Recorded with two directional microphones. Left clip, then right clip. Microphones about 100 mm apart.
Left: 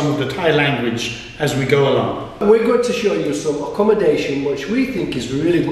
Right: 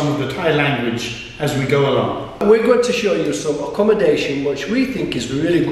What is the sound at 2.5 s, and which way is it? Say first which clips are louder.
Speech: right 1 dB; 10° right (ahead or behind).